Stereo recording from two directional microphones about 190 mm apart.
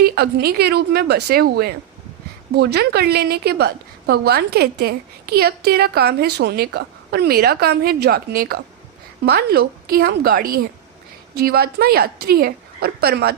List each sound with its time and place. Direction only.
0.0 s a woman's voice: 55° right (ahead or behind)